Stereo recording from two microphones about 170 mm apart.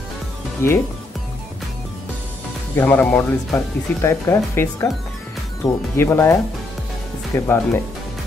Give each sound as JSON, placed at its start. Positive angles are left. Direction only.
{"t": 2.7, "sound": "speech", "side_deg": 10}
{"t": 7.3, "sound": "speech", "side_deg": 15}